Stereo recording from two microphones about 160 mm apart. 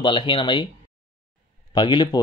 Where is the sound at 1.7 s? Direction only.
30° left (ahead or behind).